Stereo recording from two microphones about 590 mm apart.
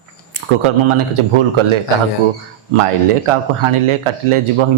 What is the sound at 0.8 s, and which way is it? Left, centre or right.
Speech, right.